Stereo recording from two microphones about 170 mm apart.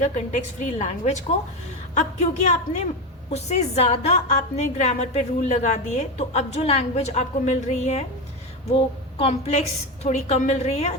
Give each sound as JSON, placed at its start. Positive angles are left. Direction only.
{"t": 0.0, "sound": "a woman's voice", "side_deg": 45}
{"t": 9.1, "sound": "a woman's voice", "side_deg": 35}